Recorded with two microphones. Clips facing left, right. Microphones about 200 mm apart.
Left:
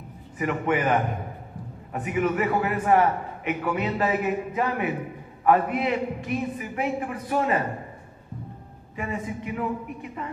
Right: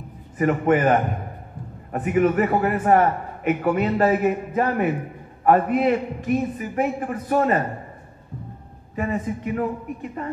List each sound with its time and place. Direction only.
0.4 s a man's voice: 45° right (ahead or behind)
8.9 s a man's voice: 45° right (ahead or behind)